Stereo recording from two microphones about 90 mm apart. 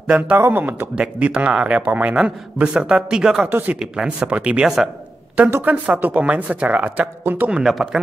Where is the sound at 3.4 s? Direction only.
20° right (ahead or behind).